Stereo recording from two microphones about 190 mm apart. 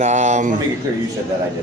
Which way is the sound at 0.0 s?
40° right (ahead or behind).